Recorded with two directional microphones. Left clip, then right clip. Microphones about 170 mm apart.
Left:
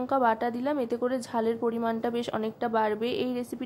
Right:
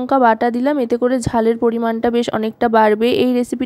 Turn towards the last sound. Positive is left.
turn(degrees=-45)  # may be behind; listen again after turning